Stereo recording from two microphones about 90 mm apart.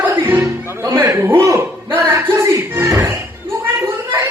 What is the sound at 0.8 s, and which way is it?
A man's voice, 35° right (ahead or behind).